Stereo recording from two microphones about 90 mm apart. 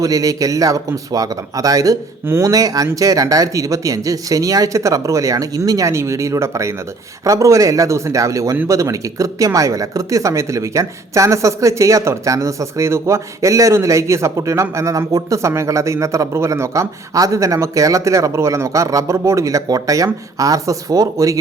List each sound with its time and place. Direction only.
0.0 s speech: 40° right (ahead or behind)
2.2 s speech: 30° right (ahead or behind)
2.5 s speech: 40° right (ahead or behind)